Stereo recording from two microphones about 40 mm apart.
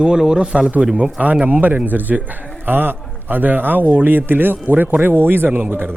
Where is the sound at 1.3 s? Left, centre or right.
Right.